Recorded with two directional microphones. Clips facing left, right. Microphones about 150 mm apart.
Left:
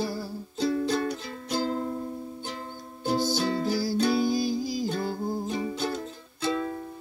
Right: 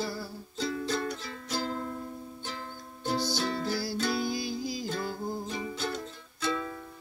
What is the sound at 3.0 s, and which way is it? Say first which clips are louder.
Music: left 4 dB; 45° left (ahead or behind).